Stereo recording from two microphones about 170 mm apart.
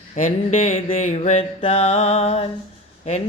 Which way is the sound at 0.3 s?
35° left (ahead or behind).